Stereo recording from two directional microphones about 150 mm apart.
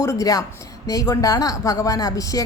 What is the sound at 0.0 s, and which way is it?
Speech, 20° left (ahead or behind).